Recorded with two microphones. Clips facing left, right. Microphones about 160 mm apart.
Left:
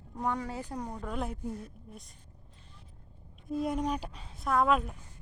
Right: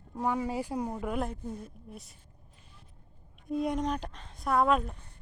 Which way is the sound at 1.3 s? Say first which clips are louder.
Left 1 dB; 5° left (ahead or behind).